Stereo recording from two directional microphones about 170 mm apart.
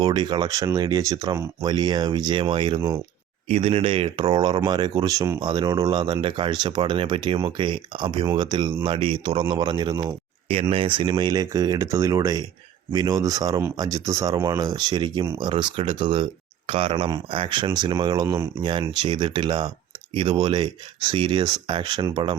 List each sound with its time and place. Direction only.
0.0 s speech: 25° right (ahead or behind)